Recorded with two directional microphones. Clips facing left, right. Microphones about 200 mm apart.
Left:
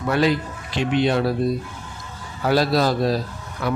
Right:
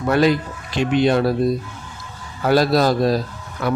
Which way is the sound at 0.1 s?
45° right (ahead or behind).